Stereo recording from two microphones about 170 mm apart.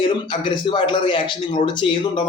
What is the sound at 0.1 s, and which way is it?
Speech, 30° left (ahead or behind).